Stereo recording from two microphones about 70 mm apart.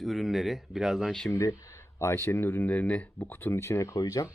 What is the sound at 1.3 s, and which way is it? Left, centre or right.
Speech, left.